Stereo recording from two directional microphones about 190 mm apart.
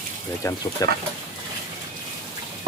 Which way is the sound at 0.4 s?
15° left (ahead or behind).